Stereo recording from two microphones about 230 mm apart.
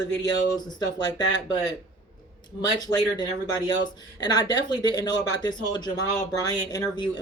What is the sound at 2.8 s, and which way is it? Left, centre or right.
Speech, centre.